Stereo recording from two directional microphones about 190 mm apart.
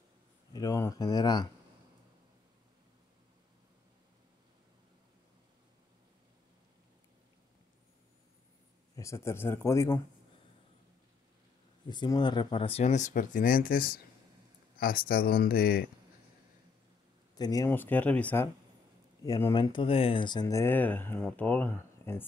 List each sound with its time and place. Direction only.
0.5 s speech: 20° left (ahead or behind)
8.9 s speech: 15° left (ahead or behind)
11.9 s speech: 25° left (ahead or behind); by 15.8 s 50° left (ahead or behind)
17.4 s speech: 20° left (ahead or behind)
17.6 s speech: 10° left (ahead or behind)